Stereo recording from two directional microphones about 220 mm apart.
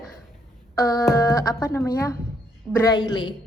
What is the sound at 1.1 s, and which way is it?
A woman's voice, 15° left (ahead or behind).